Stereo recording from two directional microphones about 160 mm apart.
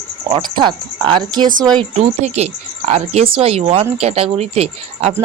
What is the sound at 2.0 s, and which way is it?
Speech, 45° right (ahead or behind).